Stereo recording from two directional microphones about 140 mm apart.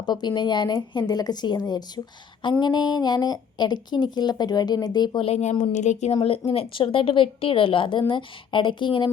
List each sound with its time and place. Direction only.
0.0 s a woman's voice: 30° left (ahead or behind); by 6.1 s 55° left (ahead or behind)
6.2 s a woman's voice: 45° left (ahead or behind)